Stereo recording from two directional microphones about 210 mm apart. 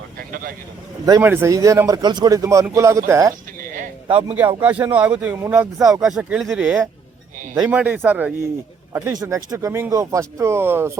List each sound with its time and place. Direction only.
0.2 s vehicle: 45° right (ahead or behind)
1.0 s speech: 15° right (ahead or behind)
3.6 s a sound: 40° right (ahead or behind)
4.4 s speech: 10° right (ahead or behind)